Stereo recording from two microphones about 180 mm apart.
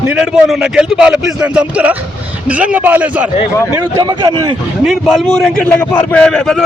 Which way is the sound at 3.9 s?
25° right (ahead or behind).